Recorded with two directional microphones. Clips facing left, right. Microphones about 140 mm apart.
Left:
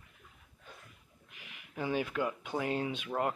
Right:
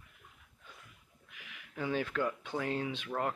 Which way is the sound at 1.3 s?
20° left (ahead or behind).